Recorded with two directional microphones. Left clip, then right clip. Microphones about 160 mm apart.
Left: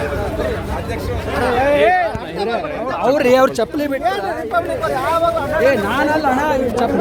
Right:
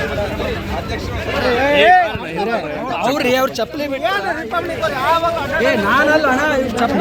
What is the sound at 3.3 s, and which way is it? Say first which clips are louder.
Speech: left 3 dB; 75° left (ahead or behind).